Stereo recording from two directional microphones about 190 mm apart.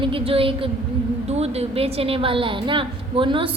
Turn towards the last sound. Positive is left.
turn(degrees=-25)  # may be behind; listen again after turning